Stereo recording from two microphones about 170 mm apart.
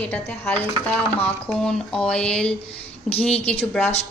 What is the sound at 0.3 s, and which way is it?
Speech, 10° left (ahead or behind).